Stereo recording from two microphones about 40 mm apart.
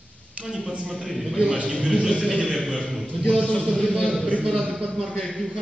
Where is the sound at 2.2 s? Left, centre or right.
Left.